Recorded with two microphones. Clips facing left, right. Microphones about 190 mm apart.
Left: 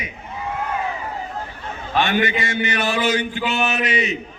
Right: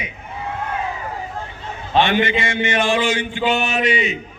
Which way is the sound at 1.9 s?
25° right (ahead or behind).